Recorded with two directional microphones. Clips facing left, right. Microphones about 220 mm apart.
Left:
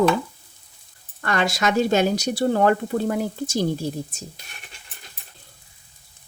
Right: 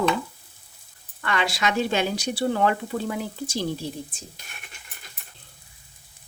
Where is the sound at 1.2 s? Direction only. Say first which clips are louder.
Left 3 dB; 45° left (ahead or behind).